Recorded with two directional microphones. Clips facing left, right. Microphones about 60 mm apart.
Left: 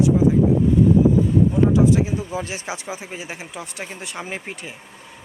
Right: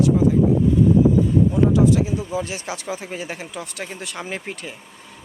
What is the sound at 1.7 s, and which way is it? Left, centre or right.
Speech, left.